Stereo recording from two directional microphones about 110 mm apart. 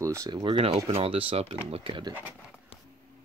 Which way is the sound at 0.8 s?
60° right (ahead or behind).